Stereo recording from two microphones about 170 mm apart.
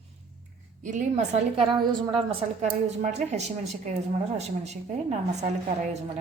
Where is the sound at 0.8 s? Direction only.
45° right (ahead or behind).